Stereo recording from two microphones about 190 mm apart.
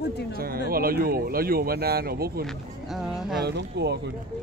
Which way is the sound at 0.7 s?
50° right (ahead or behind).